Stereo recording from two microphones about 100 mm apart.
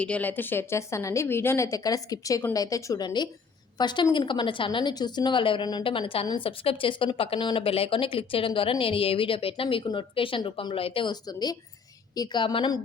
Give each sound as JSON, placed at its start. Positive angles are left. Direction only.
{"t": 0.0, "sound": "a woman's voice", "side_deg": 15}
{"t": 11.1, "sound": "a woman's voice", "side_deg": 40}